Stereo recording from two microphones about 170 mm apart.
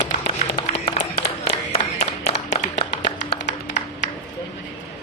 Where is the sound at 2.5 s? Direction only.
40° left (ahead or behind).